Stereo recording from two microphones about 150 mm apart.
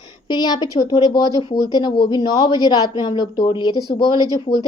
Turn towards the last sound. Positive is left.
turn(degrees=-25)  # may be behind; listen again after turning